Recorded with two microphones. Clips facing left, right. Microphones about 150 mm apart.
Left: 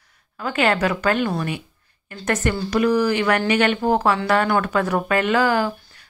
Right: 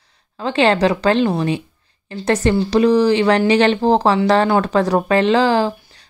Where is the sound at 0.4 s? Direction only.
30° right (ahead or behind).